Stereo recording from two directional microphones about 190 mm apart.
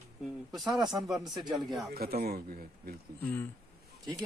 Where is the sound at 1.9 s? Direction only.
55° right (ahead or behind).